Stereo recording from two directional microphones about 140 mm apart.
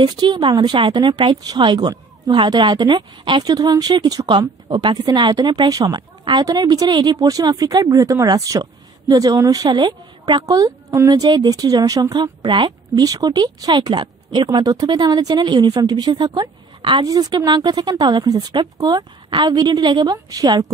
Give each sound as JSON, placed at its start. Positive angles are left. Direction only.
{"t": 0.0, "sound": "a woman's voice", "side_deg": -30}